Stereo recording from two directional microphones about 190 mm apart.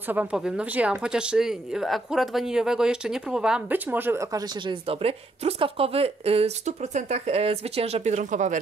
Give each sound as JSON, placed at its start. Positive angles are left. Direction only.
{"t": 0.1, "sound": "speech", "side_deg": -10}
{"t": 4.8, "sound": "speech", "side_deg": -30}